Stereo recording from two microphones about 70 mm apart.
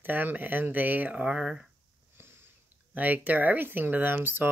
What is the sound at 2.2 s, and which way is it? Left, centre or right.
Sniff, right.